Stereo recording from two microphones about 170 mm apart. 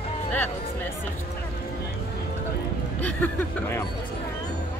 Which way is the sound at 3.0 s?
10° left (ahead or behind).